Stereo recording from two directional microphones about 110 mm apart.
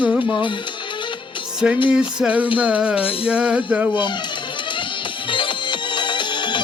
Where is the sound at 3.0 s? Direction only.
55° left (ahead or behind).